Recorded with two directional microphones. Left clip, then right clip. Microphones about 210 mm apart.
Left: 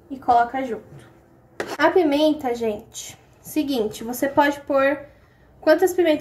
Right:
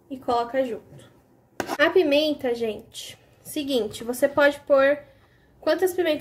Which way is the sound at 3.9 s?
20° right (ahead or behind).